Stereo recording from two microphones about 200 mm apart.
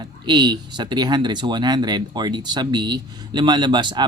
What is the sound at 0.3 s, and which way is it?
Speech, 20° right (ahead or behind).